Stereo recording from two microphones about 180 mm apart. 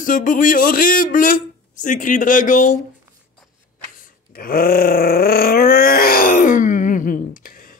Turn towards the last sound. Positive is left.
turn(degrees=50)  # may be behind; listen again after turning